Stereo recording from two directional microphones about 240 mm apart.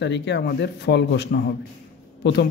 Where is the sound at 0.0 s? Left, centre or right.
Left.